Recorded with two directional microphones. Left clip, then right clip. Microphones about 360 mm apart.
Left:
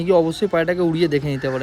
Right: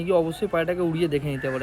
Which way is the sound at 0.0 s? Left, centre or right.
Left.